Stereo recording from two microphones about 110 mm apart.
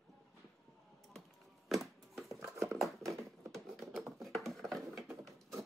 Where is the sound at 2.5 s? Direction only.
25° right (ahead or behind).